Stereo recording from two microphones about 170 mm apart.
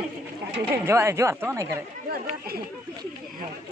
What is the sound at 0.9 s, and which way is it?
Speech, 15° right (ahead or behind).